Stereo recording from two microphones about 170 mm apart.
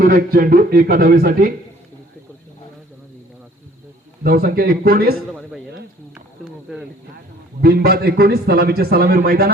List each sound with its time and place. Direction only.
0.0 s a man's voice: 55° right (ahead or behind)
4.2 s a man's voice: 65° right (ahead or behind)
5.3 s a man's voice: centre (ahead or behind)
7.6 s a man's voice: 65° right (ahead or behind)